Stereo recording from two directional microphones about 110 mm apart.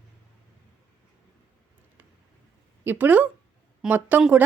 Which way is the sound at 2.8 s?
15° right (ahead or behind).